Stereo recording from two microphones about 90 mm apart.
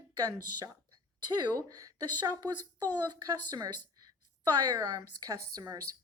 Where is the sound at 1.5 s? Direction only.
40° right (ahead or behind).